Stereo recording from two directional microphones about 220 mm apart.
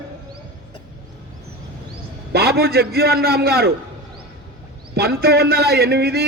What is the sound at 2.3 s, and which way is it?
A man's voice, 45° right (ahead or behind).